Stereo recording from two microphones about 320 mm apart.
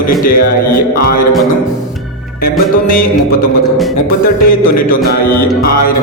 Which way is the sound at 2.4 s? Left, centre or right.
Left.